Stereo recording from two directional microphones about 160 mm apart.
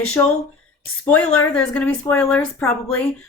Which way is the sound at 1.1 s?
5° left (ahead or behind).